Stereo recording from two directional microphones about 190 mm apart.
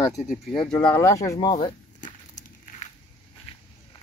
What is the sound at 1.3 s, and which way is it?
Crumpling, 40° left (ahead or behind).